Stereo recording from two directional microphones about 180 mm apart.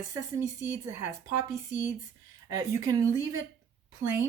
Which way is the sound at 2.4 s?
15° right (ahead or behind).